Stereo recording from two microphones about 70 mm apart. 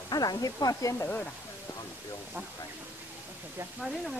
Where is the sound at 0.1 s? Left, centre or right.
Left.